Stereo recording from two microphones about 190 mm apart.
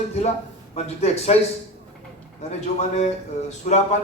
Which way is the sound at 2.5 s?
35° left (ahead or behind).